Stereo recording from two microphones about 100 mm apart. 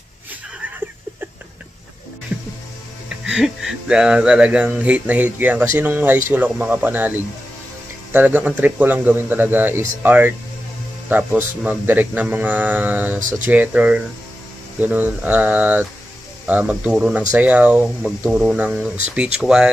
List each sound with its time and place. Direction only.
3.3 s speech: 5° right (ahead or behind)